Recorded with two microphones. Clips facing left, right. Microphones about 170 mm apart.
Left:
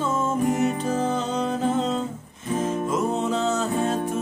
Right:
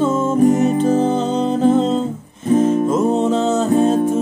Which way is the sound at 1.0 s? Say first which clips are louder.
Right 7 dB; 30° right (ahead or behind).